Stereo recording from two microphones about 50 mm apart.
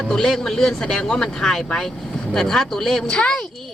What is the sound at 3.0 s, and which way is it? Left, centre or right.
Speech, centre.